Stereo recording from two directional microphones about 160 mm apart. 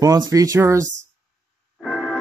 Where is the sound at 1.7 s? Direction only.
Centre (ahead or behind).